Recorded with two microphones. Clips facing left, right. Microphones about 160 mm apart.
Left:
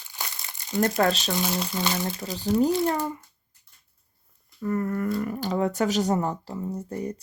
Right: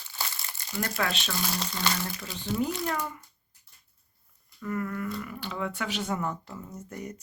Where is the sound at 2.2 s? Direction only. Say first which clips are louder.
Left 8 dB; 40° left (ahead or behind).